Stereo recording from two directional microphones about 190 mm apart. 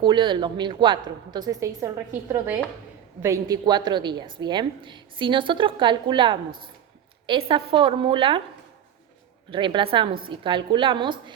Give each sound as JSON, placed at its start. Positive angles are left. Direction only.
{"t": 0.0, "sound": "a woman's voice", "side_deg": -25}
{"t": 9.5, "sound": "a woman's voice", "side_deg": -25}